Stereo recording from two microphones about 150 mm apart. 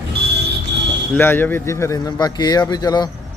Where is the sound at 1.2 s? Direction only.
15° left (ahead or behind).